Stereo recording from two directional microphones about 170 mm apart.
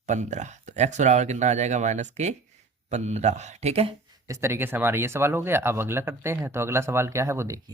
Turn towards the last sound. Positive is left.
turn(degrees=-20)  # may be behind; listen again after turning